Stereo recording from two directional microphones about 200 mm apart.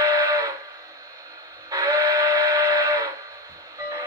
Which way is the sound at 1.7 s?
15° right (ahead or behind).